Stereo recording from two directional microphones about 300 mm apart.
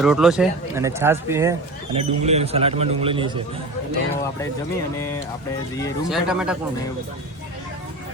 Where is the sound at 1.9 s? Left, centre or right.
Right.